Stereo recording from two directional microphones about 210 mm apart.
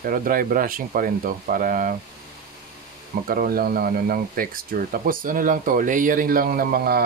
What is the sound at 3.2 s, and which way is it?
Speech, 45° right (ahead or behind).